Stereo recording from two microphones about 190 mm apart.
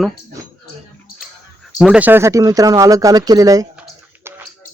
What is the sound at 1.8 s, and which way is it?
Speech, 5° right (ahead or behind).